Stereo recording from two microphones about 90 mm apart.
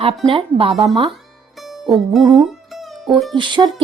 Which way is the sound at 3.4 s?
60° right (ahead or behind).